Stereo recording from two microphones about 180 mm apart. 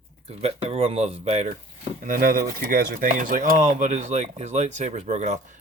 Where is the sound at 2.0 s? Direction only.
50° right (ahead or behind).